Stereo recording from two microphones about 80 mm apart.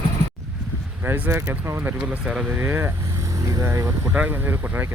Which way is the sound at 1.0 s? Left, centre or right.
Right.